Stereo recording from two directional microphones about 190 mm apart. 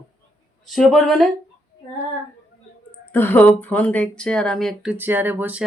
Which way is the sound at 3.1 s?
10° left (ahead or behind).